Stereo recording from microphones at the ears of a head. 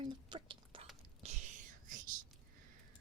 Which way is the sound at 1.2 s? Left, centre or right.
Right.